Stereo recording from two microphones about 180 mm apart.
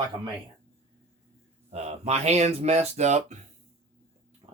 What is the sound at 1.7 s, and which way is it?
Speech, 35° right (ahead or behind).